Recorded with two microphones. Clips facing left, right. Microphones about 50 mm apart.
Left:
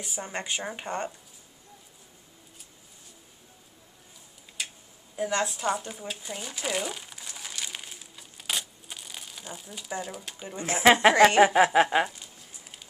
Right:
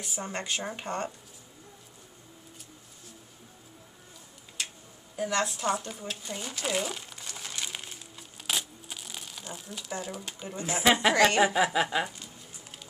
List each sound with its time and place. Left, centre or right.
0.0 s speech: centre
4.6 s tick-tock: centre
5.1 s speech: centre
7.6 s crumpling: centre
10.7 s speech: left